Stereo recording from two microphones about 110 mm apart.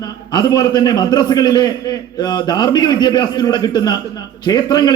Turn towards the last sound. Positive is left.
turn(degrees=40)  # may be behind; listen again after turning